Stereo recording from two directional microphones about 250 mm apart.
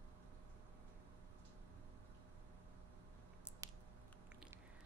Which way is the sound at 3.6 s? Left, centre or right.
Centre.